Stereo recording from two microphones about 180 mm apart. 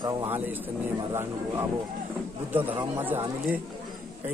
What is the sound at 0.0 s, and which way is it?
Speech, 20° right (ahead or behind).